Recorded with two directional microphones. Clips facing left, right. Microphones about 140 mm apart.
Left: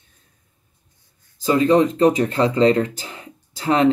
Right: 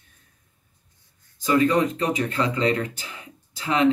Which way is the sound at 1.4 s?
30° left (ahead or behind).